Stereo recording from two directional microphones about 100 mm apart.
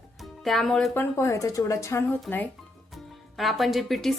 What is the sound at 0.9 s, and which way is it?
Speech, 30° left (ahead or behind).